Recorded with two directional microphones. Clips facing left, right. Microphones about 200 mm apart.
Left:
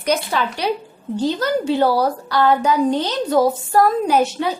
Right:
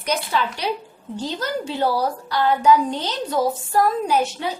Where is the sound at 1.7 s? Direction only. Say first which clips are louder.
Left 4 dB; 60° left (ahead or behind).